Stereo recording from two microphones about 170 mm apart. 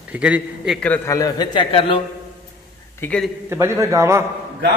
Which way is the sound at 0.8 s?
10° left (ahead or behind).